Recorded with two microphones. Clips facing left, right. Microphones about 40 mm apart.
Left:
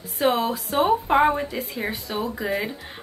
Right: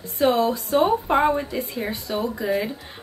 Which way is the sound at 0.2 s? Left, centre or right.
Left.